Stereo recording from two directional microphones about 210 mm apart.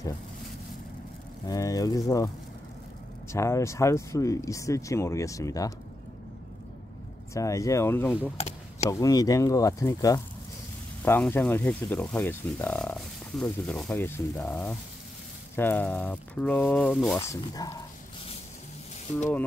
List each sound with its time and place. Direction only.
1.5 s speech: 15° left (ahead or behind)
7.3 s speech: 15° left (ahead or behind)
17.2 s speech: 15° left (ahead or behind)